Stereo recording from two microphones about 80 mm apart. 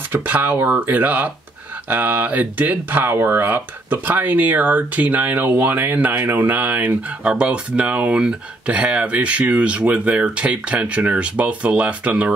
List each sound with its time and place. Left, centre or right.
0.1 s speech: right